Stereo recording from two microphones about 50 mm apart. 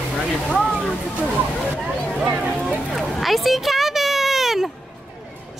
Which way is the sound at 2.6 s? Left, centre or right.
Left.